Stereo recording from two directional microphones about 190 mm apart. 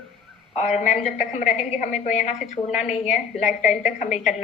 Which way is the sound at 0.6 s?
40° left (ahead or behind).